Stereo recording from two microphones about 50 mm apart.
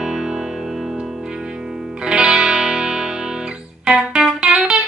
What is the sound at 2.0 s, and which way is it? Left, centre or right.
Music, centre.